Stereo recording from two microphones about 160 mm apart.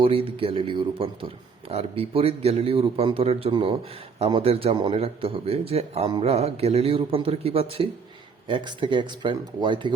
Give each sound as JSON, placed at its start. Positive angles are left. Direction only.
{"t": 0.0, "sound": "a man's voice", "side_deg": -35}